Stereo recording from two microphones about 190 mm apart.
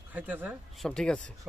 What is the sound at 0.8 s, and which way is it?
Speech, 5° left (ahead or behind).